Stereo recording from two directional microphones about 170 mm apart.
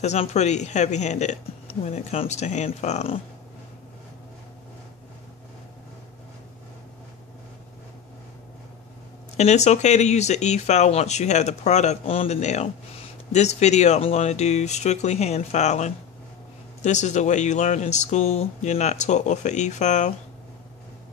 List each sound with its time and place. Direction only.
0.0 s speech: 40° left (ahead or behind)
9.4 s speech: 40° left (ahead or behind)